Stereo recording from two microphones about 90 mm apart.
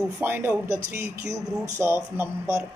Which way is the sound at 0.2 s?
25° right (ahead or behind).